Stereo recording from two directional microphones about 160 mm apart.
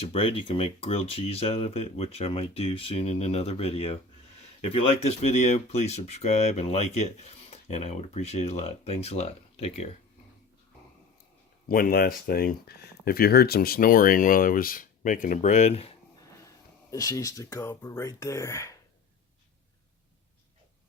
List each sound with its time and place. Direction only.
0.1 s speech: 35° left (ahead or behind)
11.7 s speech: 65° left (ahead or behind); by 15.9 s 45° left (ahead or behind)
16.9 s speech: 20° left (ahead or behind)